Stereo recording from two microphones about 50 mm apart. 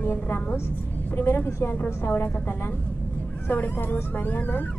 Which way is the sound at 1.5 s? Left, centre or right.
Left.